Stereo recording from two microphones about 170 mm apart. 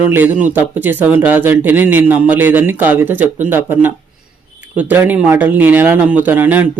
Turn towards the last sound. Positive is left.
turn(degrees=-10)  # may be behind; listen again after turning